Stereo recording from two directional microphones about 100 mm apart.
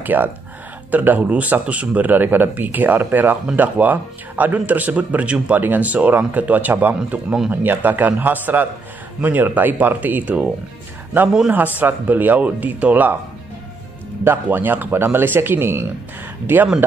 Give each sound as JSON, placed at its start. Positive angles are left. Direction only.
{"t": 0.0, "sound": "speech", "side_deg": -20}
{"t": 11.5, "sound": "speech", "side_deg": -15}
{"t": 14.2, "sound": "speech", "side_deg": -20}